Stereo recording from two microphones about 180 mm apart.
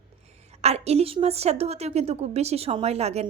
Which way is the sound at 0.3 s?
40° right (ahead or behind).